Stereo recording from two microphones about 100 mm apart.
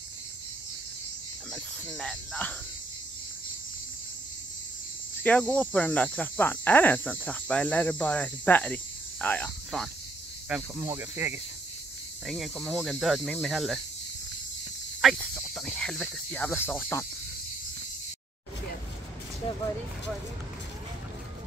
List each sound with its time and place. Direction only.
1.5 s speech: 5° left (ahead or behind)
5.2 s cricket: 15° left (ahead or behind)
9.7 s speech: 5° left (ahead or behind)
10.8 s speech: 25° right (ahead or behind)
12.3 s speech: centre (ahead or behind)
15.0 s snake: 5° left (ahead or behind)
15.4 s speech: centre (ahead or behind)
16.3 s cricket: 15° left (ahead or behind)